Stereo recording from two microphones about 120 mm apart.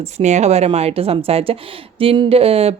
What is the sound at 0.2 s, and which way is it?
Speech, 75° right (ahead or behind).